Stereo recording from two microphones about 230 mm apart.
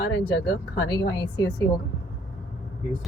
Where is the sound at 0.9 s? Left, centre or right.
Centre.